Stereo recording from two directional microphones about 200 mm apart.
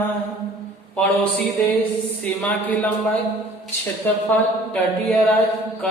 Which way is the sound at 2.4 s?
10° left (ahead or behind).